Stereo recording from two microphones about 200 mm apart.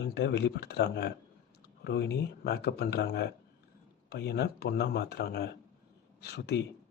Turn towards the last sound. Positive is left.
turn(degrees=55)  # may be behind; listen again after turning